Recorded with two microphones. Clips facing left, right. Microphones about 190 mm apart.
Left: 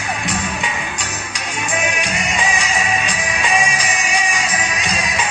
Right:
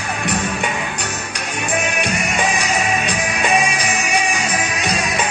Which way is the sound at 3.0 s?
60° right (ahead or behind).